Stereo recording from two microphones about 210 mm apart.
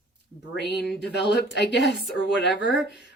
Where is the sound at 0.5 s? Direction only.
55° left (ahead or behind).